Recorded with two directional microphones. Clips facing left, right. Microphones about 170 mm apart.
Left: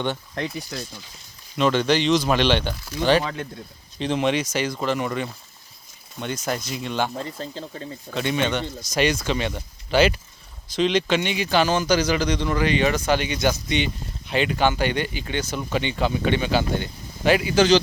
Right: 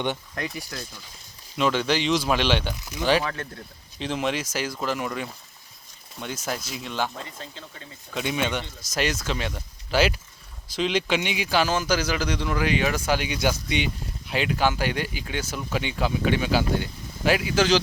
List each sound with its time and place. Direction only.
0.3 s speech: 25° left (ahead or behind)
1.5 s speech: 5° right (ahead or behind)
2.7 s speech: 20° right (ahead or behind)
3.0 s speech: 5° right (ahead or behind)
3.2 s speech: 15° left (ahead or behind)
3.9 s speech: centre (ahead or behind)
7.2 s speech: 35° left (ahead or behind)
8.1 s speech: 5° right (ahead or behind)